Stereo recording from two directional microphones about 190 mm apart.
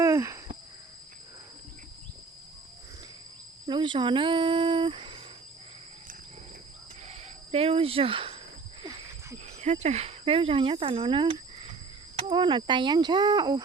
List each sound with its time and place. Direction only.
0.0 s wheeze: 15° right (ahead or behind)
3.7 s speech: 25° right (ahead or behind)
7.1 s cricket: 30° right (ahead or behind)
8.8 s a sound: 25° right (ahead or behind)
9.6 s speech: 35° right (ahead or behind); by 13.6 s 20° right (ahead or behind)